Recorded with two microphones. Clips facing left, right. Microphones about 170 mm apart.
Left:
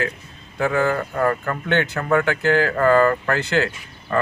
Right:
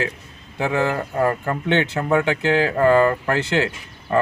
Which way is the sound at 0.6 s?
25° right (ahead or behind).